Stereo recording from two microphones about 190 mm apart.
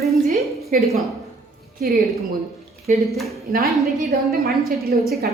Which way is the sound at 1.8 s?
50° right (ahead or behind).